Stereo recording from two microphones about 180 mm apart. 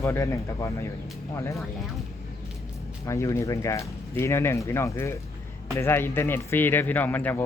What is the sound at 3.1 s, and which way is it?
Speech, 15° left (ahead or behind).